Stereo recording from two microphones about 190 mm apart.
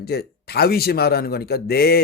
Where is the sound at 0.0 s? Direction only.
55° left (ahead or behind).